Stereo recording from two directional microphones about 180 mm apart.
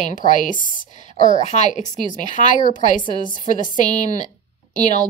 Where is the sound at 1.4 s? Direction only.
40° left (ahead or behind).